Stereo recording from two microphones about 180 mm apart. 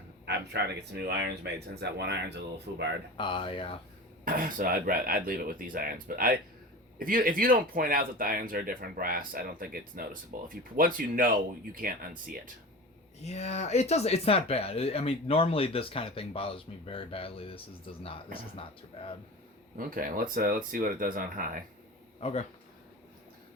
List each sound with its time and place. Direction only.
0.3 s speech: 65° right (ahead or behind)
3.2 s speech: 25° left (ahead or behind)
4.3 s speech: 50° right (ahead or behind)
13.2 s speech: 35° left (ahead or behind)
19.7 s speech: 50° right (ahead or behind)
22.2 s speech: 35° left (ahead or behind)